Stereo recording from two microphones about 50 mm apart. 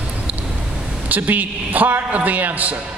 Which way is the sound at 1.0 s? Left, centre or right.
Right.